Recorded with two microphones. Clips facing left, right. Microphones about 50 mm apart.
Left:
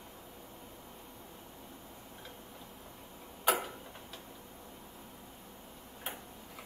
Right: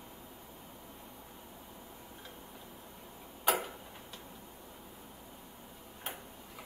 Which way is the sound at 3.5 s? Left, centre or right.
Centre.